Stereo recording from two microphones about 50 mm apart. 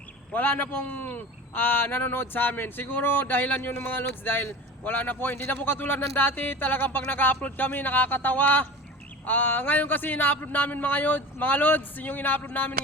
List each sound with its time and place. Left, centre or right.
0.3 s a man's voice: left